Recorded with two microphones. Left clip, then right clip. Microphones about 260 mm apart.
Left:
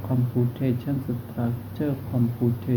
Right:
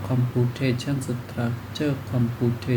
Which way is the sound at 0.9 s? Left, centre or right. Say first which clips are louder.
Right 1 dB; right.